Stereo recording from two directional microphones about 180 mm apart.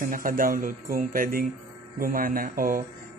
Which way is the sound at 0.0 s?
50° right (ahead or behind).